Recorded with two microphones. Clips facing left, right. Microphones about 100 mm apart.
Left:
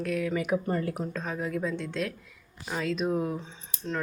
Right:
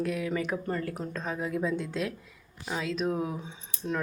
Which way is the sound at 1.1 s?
Centre (ahead or behind).